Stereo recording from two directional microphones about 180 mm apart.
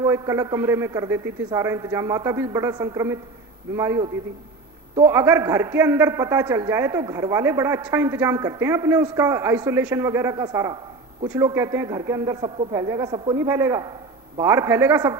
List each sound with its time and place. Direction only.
0.0 s a man's voice: 15° right (ahead or behind)